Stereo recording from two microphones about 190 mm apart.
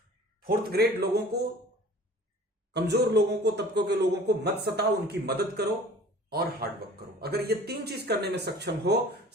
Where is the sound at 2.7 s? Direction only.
60° right (ahead or behind).